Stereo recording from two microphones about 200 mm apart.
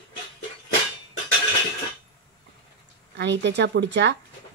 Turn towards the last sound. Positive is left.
turn(degrees=-60)  # may be behind; listen again after turning